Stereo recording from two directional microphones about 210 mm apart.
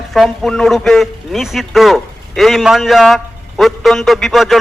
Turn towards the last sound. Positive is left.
turn(degrees=0)  # may be behind; listen again after turning